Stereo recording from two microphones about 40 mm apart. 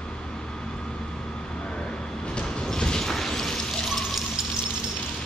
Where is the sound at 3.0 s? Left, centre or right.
Centre.